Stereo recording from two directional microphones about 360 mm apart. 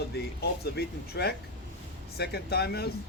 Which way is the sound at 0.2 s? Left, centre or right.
Left.